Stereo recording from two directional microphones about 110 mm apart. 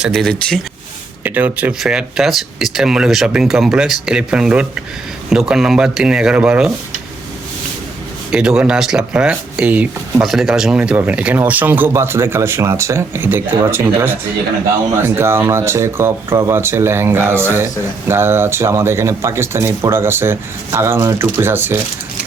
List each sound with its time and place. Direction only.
0.0 s speech: centre (ahead or behind)
1.2 s speech: 15° right (ahead or behind)
8.3 s speech: 10° right (ahead or behind)
10.2 s speech: 5° right (ahead or behind); by 21.8 s 20° right (ahead or behind)